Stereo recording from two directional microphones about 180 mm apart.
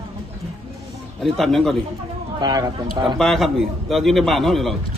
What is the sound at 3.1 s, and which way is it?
A man's voice, 5° left (ahead or behind).